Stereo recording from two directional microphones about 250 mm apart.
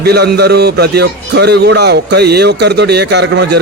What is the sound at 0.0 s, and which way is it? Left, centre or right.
A man's voice, right.